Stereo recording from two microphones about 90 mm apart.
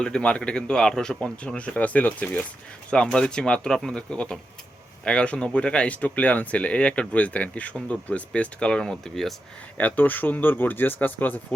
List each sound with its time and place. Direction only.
0.0 s speech: 10° left (ahead or behind)
9.7 s speech: 20° left (ahead or behind)